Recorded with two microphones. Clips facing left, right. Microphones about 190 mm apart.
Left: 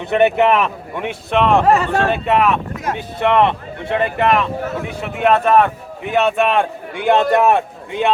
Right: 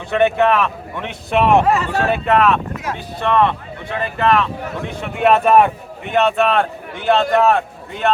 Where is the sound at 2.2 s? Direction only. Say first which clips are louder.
Right 3 dB; 10° left (ahead or behind).